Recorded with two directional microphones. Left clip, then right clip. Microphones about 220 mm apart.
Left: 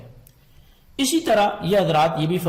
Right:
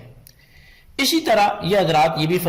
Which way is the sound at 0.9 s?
20° right (ahead or behind).